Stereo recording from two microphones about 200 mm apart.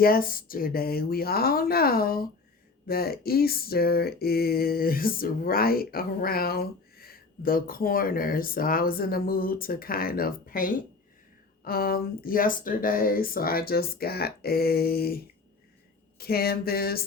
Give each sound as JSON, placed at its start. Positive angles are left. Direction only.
{"t": 0.0, "sound": "speech", "side_deg": 45}